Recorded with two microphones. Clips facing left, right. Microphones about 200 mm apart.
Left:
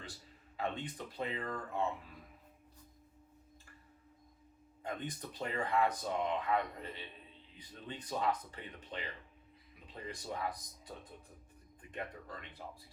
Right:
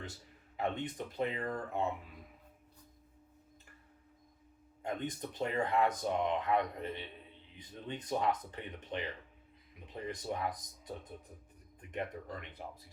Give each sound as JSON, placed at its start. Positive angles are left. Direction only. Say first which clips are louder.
{"t": 0.5, "sound": "speech", "louder": "right 3 dB", "side_deg": -20}
{"t": 4.8, "sound": "speech", "louder": "right 4 dB", "side_deg": -20}
{"t": 11.9, "sound": "speech", "louder": "right 4 dB", "side_deg": -20}